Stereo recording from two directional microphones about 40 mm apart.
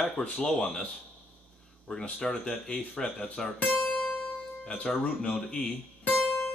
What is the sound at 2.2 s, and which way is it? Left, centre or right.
Speech, left.